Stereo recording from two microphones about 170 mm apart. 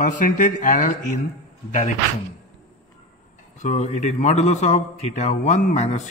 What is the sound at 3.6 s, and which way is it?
A man's voice, 45° left (ahead or behind).